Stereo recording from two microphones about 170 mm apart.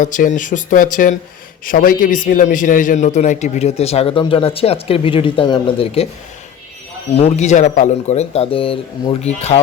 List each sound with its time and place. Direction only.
0.0 s a man's voice: 50° left (ahead or behind)
7.1 s a man's voice: 35° left (ahead or behind)